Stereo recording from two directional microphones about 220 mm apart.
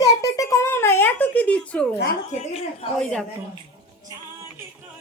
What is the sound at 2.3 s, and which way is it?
Speech, 30° left (ahead or behind).